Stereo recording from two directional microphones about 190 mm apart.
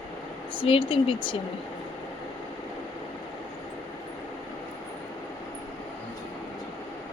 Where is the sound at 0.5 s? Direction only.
25° left (ahead or behind).